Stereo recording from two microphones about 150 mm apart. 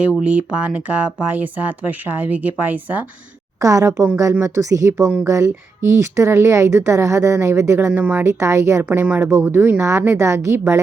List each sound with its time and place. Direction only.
0.0 s a woman's voice: 10° right (ahead or behind)
3.6 s a woman's voice: 20° right (ahead or behind)